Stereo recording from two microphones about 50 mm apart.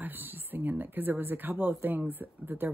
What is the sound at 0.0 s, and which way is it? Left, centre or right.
Speech, right.